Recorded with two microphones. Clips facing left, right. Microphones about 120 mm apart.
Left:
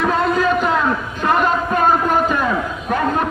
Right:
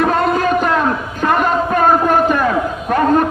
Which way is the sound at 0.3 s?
55° right (ahead or behind).